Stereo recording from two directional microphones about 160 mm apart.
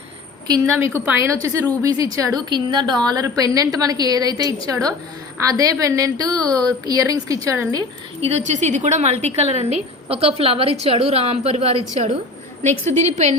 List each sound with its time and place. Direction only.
0.4 s a woman's voice: 20° right (ahead or behind)
8.2 s a woman's voice: 45° right (ahead or behind)
13.1 s a woman's voice: 45° right (ahead or behind)